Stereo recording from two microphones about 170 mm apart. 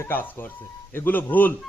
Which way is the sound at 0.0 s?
10° left (ahead or behind).